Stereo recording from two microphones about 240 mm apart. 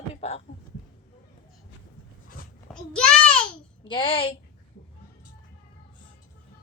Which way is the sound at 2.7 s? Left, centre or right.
Centre.